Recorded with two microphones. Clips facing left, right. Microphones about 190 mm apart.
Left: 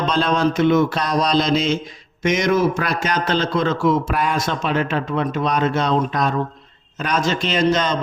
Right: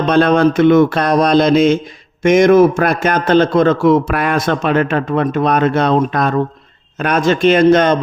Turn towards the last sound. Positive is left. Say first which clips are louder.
# right 9 dB
turn(degrees=-55)  # may be behind; listen again after turning